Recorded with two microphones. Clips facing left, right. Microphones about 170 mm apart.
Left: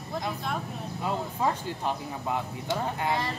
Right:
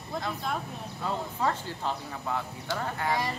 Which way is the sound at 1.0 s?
10° left (ahead or behind).